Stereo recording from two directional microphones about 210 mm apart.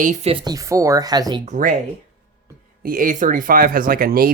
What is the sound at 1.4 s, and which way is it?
Speech, 40° right (ahead or behind).